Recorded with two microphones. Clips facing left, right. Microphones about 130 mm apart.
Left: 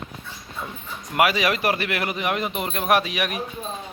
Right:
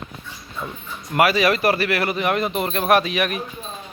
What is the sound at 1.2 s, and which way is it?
Speech, 15° left (ahead or behind).